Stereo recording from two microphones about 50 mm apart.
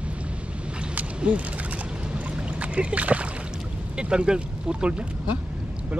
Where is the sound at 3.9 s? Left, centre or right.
Centre.